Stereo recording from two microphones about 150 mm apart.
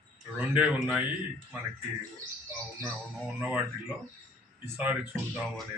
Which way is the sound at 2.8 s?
5° left (ahead or behind).